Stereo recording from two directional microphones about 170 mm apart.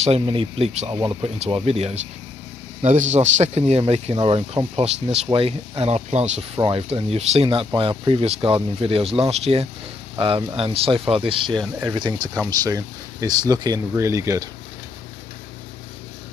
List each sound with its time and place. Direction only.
0.0 s speech: 35° right (ahead or behind); by 14.5 s 20° right (ahead or behind)